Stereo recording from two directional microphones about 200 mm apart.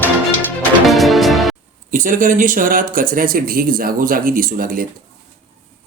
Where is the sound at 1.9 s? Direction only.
45° right (ahead or behind).